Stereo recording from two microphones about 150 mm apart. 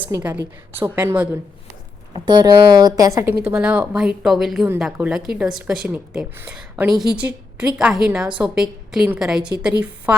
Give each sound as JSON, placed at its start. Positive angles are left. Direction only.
{"t": 0.2, "sound": "a woman's voice", "side_deg": -10}
{"t": 2.1, "sound": "speech", "side_deg": -30}
{"t": 3.4, "sound": "a woman's voice", "side_deg": -10}
{"t": 6.3, "sound": "a woman's voice", "side_deg": -15}
{"t": 6.6, "sound": "a woman's voice", "side_deg": -5}